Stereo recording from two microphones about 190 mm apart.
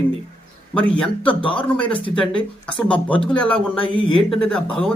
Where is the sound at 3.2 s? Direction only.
5° left (ahead or behind).